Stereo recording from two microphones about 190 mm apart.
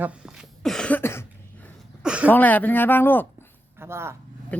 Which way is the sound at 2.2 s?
10° left (ahead or behind).